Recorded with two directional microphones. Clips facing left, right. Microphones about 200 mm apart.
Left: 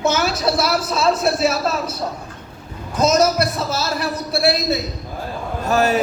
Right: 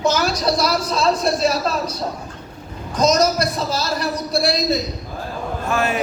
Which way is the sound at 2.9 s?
5° left (ahead or behind).